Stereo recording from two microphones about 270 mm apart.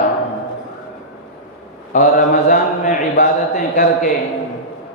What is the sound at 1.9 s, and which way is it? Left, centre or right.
A man's voice, left.